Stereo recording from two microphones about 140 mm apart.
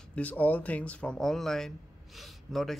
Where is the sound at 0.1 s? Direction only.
10° left (ahead or behind).